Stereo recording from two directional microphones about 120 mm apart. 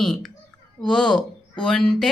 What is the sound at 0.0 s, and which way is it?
Speech, centre (ahead or behind).